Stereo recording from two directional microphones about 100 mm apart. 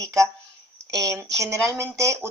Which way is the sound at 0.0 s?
30° right (ahead or behind).